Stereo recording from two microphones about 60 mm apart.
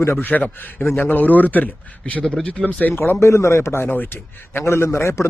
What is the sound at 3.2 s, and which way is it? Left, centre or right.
Speech, left.